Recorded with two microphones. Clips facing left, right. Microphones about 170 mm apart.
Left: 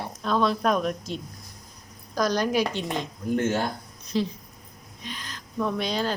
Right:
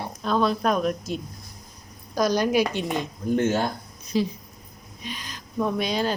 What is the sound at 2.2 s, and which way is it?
Speech, 10° right (ahead or behind).